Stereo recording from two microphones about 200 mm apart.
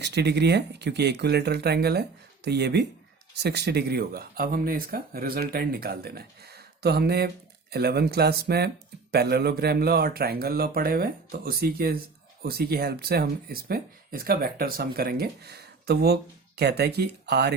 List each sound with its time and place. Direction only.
0.0 s speech: 55° right (ahead or behind)